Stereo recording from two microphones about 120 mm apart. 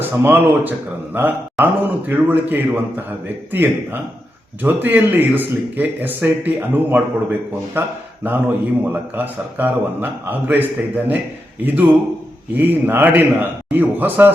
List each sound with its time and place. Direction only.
0.0 s speech: 15° right (ahead or behind)